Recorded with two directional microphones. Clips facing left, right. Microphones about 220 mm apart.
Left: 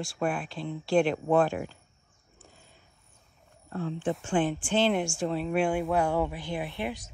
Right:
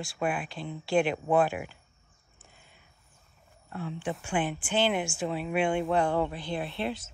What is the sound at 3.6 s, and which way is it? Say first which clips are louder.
Speech: left 4 dB; 45° left (ahead or behind).